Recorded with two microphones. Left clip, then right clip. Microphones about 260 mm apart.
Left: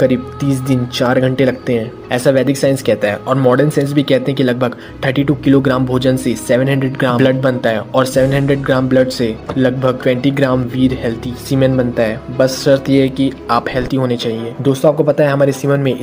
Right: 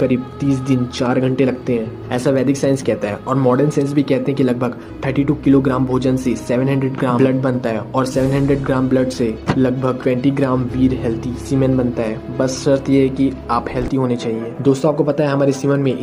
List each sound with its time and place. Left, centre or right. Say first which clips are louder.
0.0 s speech: left 4 dB; left